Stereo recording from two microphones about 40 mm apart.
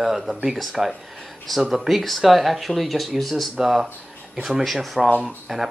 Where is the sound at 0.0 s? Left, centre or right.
Centre.